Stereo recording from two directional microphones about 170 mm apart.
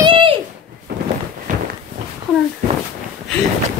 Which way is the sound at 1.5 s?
50° right (ahead or behind).